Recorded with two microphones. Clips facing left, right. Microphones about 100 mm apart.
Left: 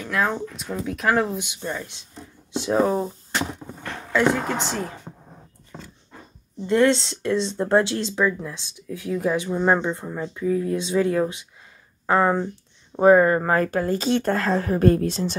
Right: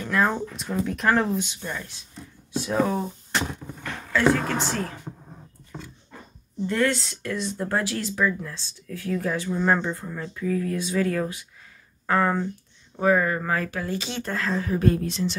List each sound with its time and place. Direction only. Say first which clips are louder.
0.0 s speech: right 1 dB; centre (ahead or behind)
2.5 s speech: left 3 dB; 25° left (ahead or behind)
4.1 s a woman's voice: left 1 dB; 15° left (ahead or behind)
6.7 s speech: left 6 dB; 25° left (ahead or behind)
12.9 s speech: left 7 dB; 35° left (ahead or behind)